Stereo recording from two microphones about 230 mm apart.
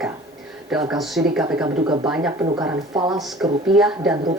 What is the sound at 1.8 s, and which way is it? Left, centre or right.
Speech, centre.